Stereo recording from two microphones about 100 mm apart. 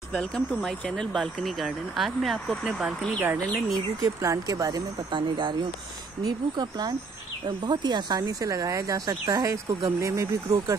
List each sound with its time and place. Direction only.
0.1 s speech: 10° left (ahead or behind)
3.2 s speech: 25° right (ahead or behind)